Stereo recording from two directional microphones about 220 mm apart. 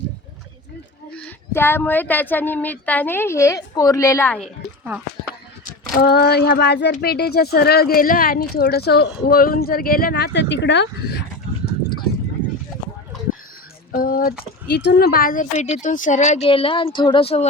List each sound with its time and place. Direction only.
1.1 s a woman's voice: 10° left (ahead or behind)
5.9 s speech: 45° left (ahead or behind)
13.9 s speech: 40° left (ahead or behind)